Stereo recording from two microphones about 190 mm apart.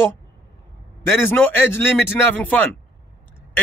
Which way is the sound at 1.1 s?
10° left (ahead or behind).